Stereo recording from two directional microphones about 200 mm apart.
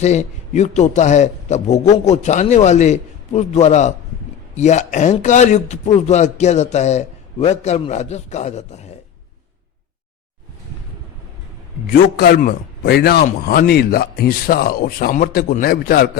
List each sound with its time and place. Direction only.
0.0 s speech: 35° left (ahead or behind)
11.9 s a man's voice: 50° left (ahead or behind)